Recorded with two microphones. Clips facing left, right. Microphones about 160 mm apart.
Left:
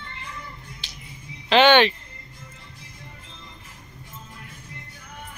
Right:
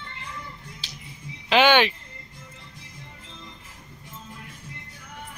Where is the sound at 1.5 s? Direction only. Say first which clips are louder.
Left 3 dB; 10° right (ahead or behind).